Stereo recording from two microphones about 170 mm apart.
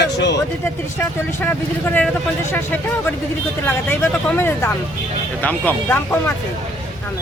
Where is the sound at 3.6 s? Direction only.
10° left (ahead or behind).